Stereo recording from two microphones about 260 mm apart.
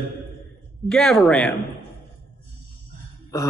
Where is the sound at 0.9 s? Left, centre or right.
Centre.